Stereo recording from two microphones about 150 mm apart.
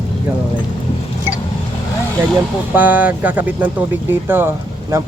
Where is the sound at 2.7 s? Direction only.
10° right (ahead or behind).